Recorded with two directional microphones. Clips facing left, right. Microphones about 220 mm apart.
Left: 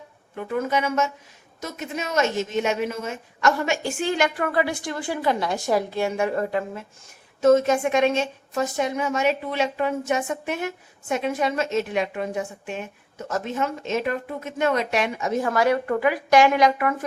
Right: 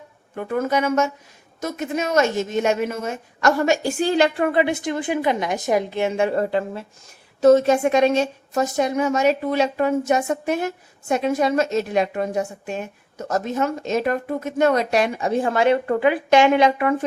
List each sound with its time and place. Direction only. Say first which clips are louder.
0.3 s a woman's voice: right 3 dB; 50° right (ahead or behind); by 17.1 s 30° right (ahead or behind)